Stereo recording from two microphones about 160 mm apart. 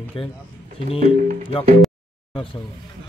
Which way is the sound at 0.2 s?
35° left (ahead or behind).